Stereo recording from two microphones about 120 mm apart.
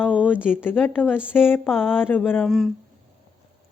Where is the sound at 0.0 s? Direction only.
10° right (ahead or behind).